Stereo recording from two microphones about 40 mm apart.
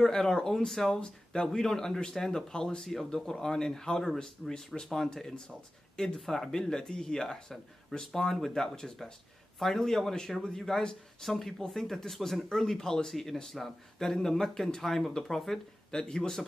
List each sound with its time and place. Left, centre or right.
0.0 s speech: centre
0.7 s speech: centre
0.9 s speech: left; by 5.1 s centre
5.9 s speech: centre